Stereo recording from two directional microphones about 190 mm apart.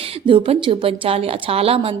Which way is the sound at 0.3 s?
30° right (ahead or behind).